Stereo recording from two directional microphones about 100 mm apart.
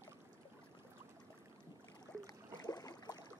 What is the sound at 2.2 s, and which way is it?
Boat, 40° left (ahead or behind).